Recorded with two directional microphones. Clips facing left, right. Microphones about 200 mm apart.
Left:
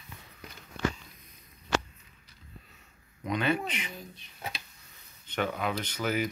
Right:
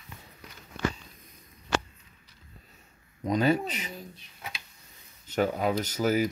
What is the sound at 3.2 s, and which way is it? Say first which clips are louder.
Speech: right 4 dB; 40° right (ahead or behind).